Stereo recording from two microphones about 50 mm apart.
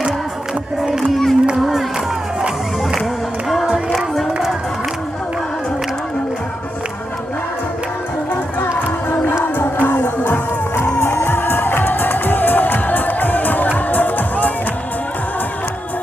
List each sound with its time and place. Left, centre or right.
0.8 s crowd: centre
1.1 s crowd: centre
9.0 s music: left